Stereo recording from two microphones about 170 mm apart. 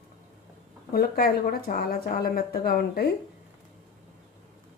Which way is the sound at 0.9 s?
60° left (ahead or behind).